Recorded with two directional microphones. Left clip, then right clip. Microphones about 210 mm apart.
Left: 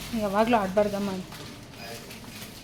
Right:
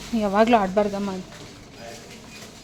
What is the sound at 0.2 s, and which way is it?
Speech, 30° right (ahead or behind).